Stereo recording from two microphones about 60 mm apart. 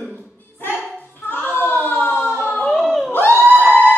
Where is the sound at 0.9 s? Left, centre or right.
Left.